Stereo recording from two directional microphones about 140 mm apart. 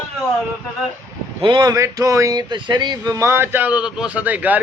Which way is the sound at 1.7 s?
25° right (ahead or behind).